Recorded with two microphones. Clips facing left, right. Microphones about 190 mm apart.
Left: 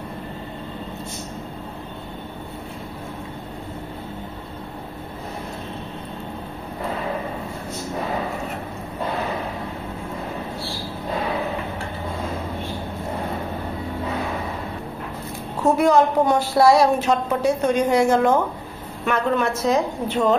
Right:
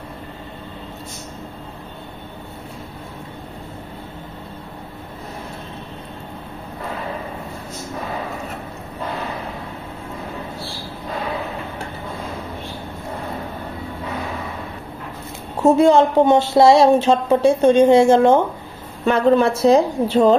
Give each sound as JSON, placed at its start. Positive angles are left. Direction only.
{"t": 15.6, "sound": "a woman's voice", "side_deg": -25}